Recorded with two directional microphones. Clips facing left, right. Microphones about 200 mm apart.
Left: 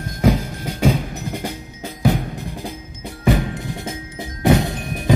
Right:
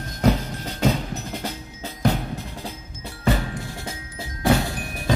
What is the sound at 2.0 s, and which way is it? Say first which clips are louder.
Drum: left 3 dB; 15° left (ahead or behind).